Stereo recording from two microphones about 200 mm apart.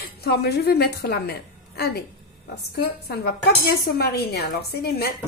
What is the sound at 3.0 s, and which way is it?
Speech, 50° left (ahead or behind).